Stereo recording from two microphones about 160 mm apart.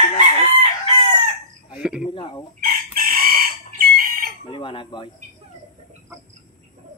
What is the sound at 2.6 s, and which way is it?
Chicken, 65° right (ahead or behind).